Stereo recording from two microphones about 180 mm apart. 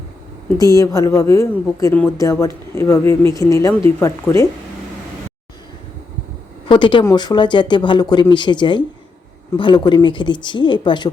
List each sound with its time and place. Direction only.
0.6 s a woman's voice: 20° left (ahead or behind)
6.7 s speech: 25° left (ahead or behind)